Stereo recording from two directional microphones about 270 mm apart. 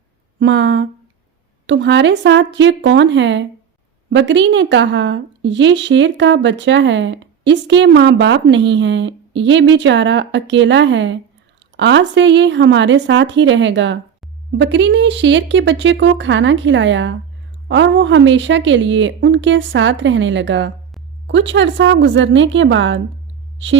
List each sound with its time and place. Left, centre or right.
0.3 s a woman's voice: right